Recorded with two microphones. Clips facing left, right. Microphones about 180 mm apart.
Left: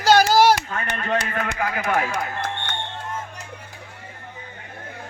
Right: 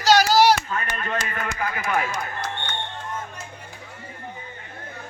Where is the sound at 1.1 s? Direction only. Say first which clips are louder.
Left 6 dB; 65° left (ahead or behind).